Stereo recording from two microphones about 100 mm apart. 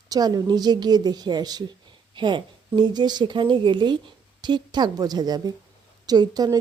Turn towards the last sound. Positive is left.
turn(degrees=-40)  # may be behind; listen again after turning